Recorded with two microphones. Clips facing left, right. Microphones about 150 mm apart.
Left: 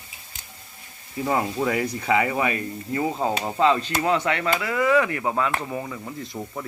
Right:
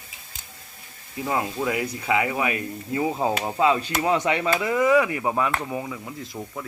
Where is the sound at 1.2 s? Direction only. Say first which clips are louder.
Left 2 dB; centre (ahead or behind).